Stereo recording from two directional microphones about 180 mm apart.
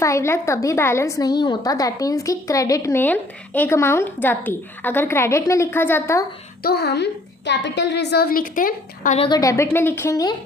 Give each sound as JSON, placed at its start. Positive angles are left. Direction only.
{"t": 0.0, "sound": "a woman's voice", "side_deg": 15}
{"t": 6.6, "sound": "a woman's voice", "side_deg": 60}
{"t": 9.1, "sound": "a woman's voice", "side_deg": 30}
{"t": 9.4, "sound": "a woman's voice", "side_deg": 15}